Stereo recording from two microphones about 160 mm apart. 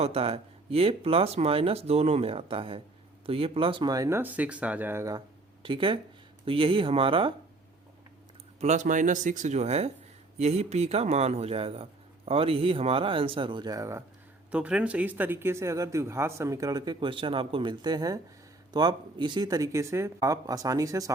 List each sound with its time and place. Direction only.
0.0 s speech: 40° right (ahead or behind); by 5.2 s 20° right (ahead or behind)
5.6 s speech: 30° right (ahead or behind)
8.6 s speech: 50° right (ahead or behind); by 14.0 s 20° right (ahead or behind)
14.5 s speech: 10° right (ahead or behind)